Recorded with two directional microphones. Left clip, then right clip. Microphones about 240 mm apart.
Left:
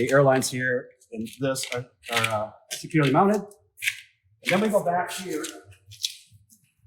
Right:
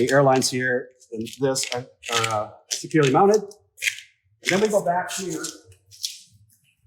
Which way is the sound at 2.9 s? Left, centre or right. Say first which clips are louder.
Right 4 dB; right.